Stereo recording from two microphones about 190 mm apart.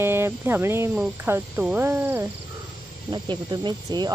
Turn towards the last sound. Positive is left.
turn(degrees=-20)  # may be behind; listen again after turning